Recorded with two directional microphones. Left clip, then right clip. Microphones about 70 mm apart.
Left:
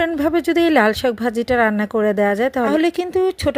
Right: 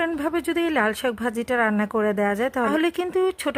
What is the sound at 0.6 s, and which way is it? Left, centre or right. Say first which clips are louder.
Speech: left 8 dB; left.